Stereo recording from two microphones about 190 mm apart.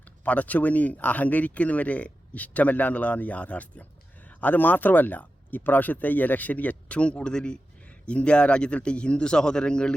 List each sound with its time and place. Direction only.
0.3 s speech: 10° left (ahead or behind)